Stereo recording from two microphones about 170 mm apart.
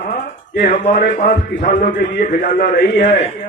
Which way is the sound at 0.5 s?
55° left (ahead or behind).